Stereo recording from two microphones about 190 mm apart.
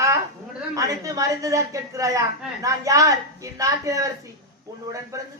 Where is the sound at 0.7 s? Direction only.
15° right (ahead or behind).